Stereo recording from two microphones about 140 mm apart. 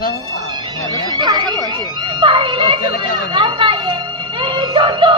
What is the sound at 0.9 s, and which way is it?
A woman's voice, 30° right (ahead or behind).